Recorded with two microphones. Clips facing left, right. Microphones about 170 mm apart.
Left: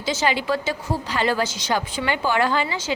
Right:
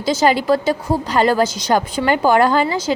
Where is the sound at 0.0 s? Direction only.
40° right (ahead or behind).